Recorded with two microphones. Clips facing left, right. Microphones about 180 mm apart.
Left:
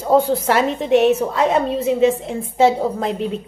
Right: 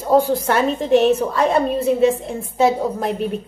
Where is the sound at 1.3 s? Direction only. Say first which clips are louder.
Even; 20° left (ahead or behind).